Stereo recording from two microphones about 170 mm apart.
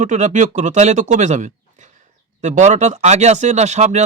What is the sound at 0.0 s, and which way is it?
Speech, 45° right (ahead or behind).